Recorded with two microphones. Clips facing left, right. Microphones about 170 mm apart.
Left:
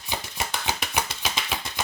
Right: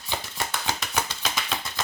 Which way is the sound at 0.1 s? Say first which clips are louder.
Even; 10° left (ahead or behind).